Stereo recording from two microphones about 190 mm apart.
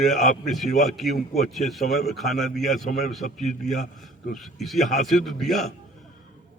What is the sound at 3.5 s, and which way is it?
Speech, 40° left (ahead or behind).